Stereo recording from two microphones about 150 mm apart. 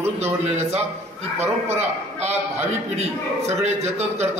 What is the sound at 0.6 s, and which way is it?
A man's voice, 45° right (ahead or behind).